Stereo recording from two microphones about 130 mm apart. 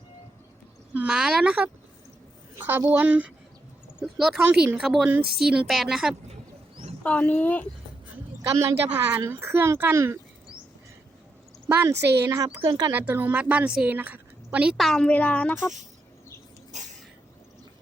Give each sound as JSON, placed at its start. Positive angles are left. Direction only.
{"t": 0.9, "sound": "a woman's voice", "side_deg": -5}
{"t": 4.4, "sound": "a woman's voice", "side_deg": -15}
{"t": 4.8, "sound": "a woman's voice", "side_deg": -5}
{"t": 7.0, "sound": "speech", "side_deg": 10}
{"t": 8.4, "sound": "a woman's voice", "side_deg": -20}
{"t": 11.7, "sound": "a woman's voice", "side_deg": -25}
{"t": 13.0, "sound": "a woman's voice", "side_deg": -15}
{"t": 16.7, "sound": "a sound", "side_deg": -65}